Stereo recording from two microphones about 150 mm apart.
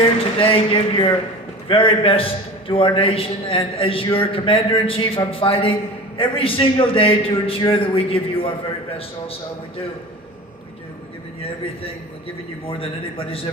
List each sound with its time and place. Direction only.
0.0 s a man's voice: 35° left (ahead or behind)
12.6 s a man's voice: 40° left (ahead or behind)